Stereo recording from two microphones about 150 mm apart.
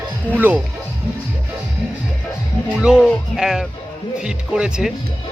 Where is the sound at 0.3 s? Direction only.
10° right (ahead or behind).